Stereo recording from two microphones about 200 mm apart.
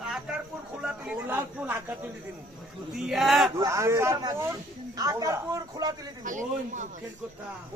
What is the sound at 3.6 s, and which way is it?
A man's voice, 15° right (ahead or behind).